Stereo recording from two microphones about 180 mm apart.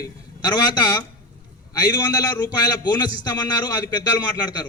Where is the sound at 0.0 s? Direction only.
20° left (ahead or behind).